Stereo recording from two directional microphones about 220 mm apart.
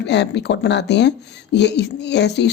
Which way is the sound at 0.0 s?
50° left (ahead or behind).